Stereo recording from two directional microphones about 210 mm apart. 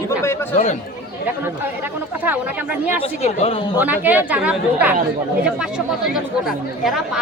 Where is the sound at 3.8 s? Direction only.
10° right (ahead or behind).